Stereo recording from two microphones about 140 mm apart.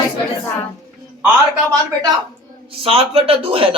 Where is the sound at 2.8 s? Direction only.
45° right (ahead or behind).